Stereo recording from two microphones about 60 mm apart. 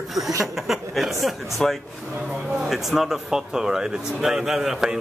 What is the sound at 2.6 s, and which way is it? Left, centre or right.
Speech, centre.